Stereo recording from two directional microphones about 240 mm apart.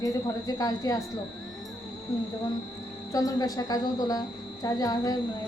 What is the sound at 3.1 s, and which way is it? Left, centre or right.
A woman's voice, centre.